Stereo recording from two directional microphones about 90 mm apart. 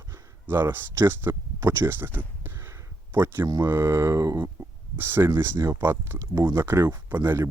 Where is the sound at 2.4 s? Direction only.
25° right (ahead or behind).